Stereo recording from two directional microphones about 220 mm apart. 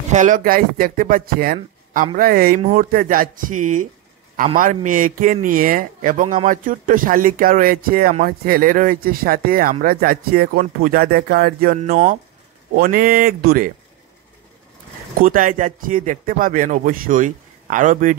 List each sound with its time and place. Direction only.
0.1 s speech: 35° right (ahead or behind)
15.1 s speech: 40° right (ahead or behind)